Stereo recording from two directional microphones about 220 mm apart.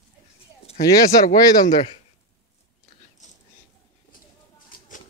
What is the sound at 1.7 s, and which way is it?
Speech, 30° left (ahead or behind).